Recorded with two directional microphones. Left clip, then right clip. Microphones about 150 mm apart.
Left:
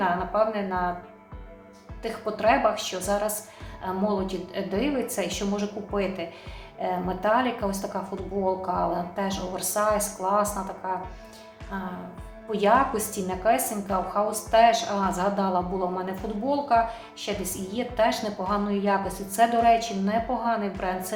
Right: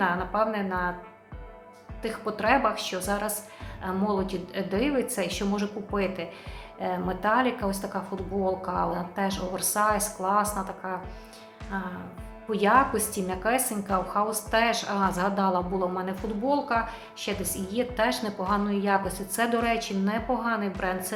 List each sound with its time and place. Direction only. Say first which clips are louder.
0.0 s speech: left 2 dB; 40° right (ahead or behind)
2.0 s speech: left 2 dB; 35° right (ahead or behind)